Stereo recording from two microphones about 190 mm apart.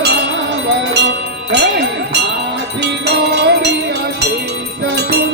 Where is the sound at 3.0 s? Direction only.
60° right (ahead or behind).